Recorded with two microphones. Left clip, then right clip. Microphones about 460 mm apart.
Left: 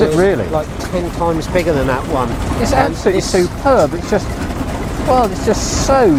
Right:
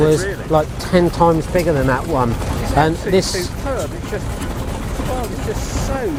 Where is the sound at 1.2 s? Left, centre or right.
Right.